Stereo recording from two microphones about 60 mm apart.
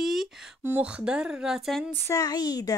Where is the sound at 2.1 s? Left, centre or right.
Left.